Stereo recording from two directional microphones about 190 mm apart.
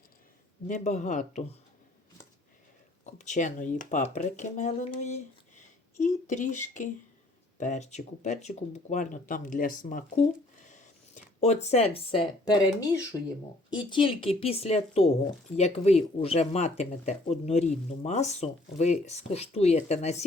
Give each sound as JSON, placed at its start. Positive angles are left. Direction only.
{"t": 0.7, "sound": "speech", "side_deg": 40}
{"t": 3.1, "sound": "speech", "side_deg": 40}